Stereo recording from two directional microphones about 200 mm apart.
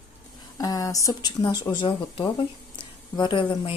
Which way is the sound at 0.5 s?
20° left (ahead or behind).